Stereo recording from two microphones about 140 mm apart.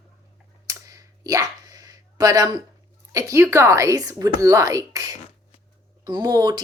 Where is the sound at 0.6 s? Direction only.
25° right (ahead or behind).